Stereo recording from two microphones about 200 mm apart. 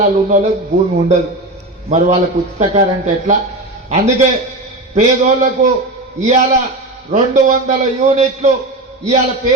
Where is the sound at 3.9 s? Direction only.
35° right (ahead or behind).